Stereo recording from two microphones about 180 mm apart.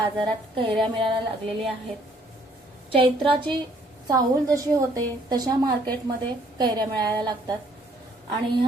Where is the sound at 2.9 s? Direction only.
30° right (ahead or behind).